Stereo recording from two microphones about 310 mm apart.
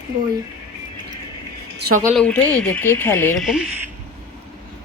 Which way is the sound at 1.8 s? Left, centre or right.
Right.